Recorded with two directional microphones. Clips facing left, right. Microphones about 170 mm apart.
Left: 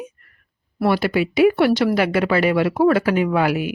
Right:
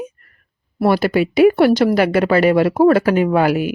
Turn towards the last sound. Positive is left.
turn(degrees=-40)  # may be behind; listen again after turning